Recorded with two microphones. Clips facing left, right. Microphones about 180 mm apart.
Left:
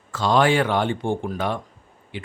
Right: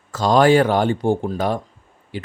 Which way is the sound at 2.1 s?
40° right (ahead or behind).